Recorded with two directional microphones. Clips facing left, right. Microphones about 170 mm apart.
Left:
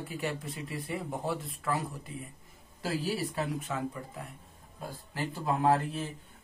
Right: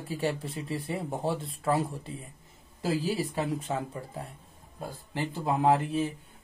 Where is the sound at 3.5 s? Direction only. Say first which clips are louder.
Right 2 dB; 30° right (ahead or behind).